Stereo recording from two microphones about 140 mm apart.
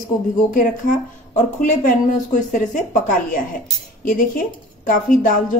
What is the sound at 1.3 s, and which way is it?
Speech, 65° left (ahead or behind).